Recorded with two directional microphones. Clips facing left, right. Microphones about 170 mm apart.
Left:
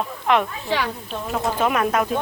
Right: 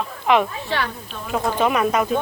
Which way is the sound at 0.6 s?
10° left (ahead or behind).